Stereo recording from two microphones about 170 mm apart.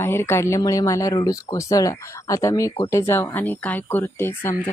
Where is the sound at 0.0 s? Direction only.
15° left (ahead or behind).